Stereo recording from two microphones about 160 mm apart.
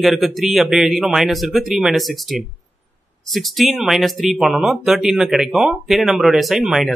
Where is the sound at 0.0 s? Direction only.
Centre (ahead or behind).